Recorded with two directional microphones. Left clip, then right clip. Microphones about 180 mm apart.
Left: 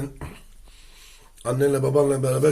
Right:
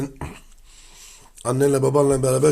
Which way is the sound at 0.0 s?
60° right (ahead or behind).